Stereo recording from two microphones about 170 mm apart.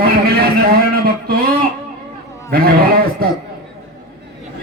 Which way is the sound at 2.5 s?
65° right (ahead or behind).